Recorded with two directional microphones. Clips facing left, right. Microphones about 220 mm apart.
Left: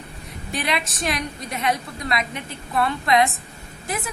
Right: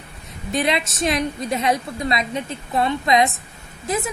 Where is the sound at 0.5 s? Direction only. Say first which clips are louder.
Right 5 dB; 25° right (ahead or behind).